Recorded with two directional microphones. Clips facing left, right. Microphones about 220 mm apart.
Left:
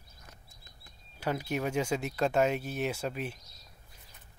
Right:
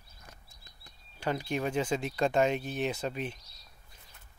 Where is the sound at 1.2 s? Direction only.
10° left (ahead or behind).